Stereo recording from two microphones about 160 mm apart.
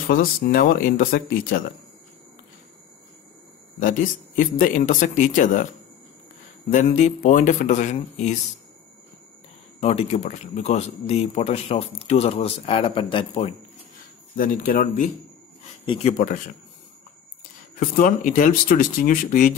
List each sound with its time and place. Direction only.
0.1 s speech: 60° left (ahead or behind)
3.8 s speech: 55° left (ahead or behind)
6.7 s speech: 45° left (ahead or behind)
9.8 s speech: 40° left (ahead or behind)
14.3 s speech: 60° left (ahead or behind)
15.8 s speech: 30° left (ahead or behind)
16.1 s speech: 50° left (ahead or behind)
17.7 s speech: 60° left (ahead or behind)